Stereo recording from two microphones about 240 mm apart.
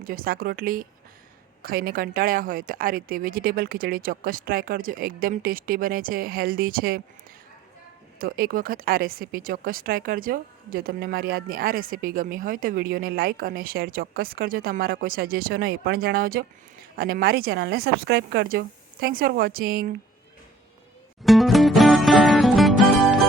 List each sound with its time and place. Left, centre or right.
0.0 s speech: right
8.2 s speech: right
21.2 s music: centre